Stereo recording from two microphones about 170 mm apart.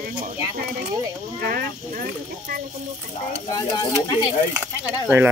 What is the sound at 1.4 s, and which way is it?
Speech, 60° right (ahead or behind).